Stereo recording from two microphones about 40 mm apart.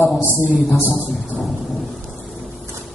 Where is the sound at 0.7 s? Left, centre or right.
Left.